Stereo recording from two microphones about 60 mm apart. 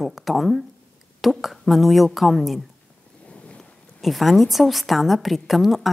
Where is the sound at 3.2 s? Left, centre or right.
Left.